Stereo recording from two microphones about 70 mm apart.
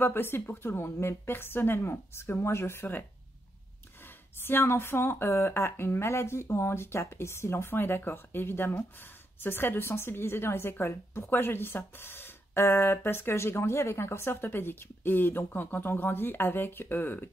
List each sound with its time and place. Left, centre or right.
0.0 s a woman's voice: left
4.4 s a woman's voice: left